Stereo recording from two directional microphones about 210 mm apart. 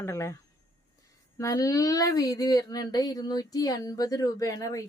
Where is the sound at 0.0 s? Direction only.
15° left (ahead or behind).